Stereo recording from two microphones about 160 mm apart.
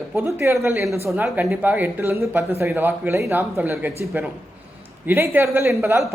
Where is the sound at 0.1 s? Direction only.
15° right (ahead or behind).